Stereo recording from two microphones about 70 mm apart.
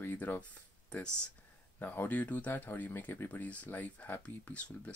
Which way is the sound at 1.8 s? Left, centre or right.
Left.